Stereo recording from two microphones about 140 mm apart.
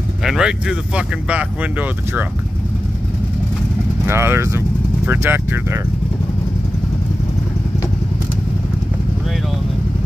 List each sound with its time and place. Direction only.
0.2 s speech: 5° right (ahead or behind)
4.0 s speech: 15° right (ahead or behind)